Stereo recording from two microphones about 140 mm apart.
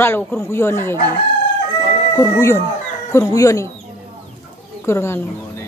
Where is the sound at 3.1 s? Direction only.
20° left (ahead or behind).